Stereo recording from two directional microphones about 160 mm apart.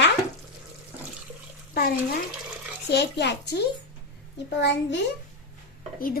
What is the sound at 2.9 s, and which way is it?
Speech, 90° left.